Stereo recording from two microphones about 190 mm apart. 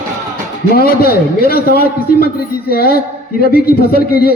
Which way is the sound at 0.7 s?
50° left (ahead or behind).